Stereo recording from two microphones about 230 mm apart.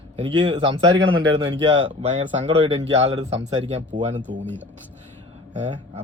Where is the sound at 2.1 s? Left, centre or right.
Right.